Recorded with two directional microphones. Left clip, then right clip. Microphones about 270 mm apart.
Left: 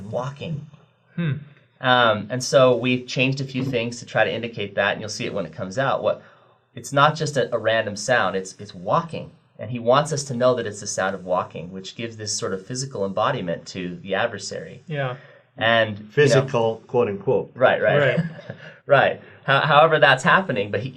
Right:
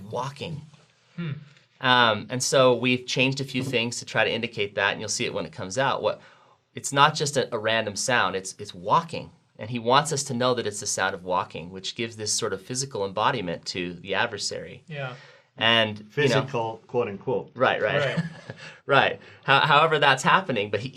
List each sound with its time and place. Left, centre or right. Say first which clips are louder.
0.1 s speech: left 3 dB; right
1.1 s speech: left 8 dB; left
1.8 s speech: left 2 dB; right
14.8 s speech: left 10 dB; left
15.5 s speech: left 2 dB; right
16.1 s speech: left 6 dB; centre
17.6 s speech: left 5 dB; right